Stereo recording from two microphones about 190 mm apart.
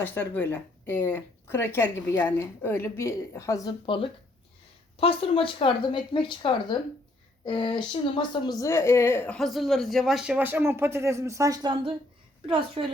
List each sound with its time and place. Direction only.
0.0 s a woman's voice: 10° left (ahead or behind); by 12.8 s 25° right (ahead or behind)